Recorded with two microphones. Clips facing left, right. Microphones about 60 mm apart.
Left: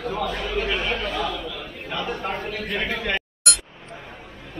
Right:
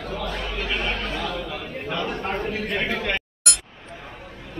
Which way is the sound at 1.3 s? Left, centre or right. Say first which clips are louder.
Right 1 dB; right.